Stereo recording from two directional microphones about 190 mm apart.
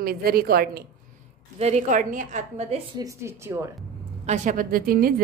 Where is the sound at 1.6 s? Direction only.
35° right (ahead or behind).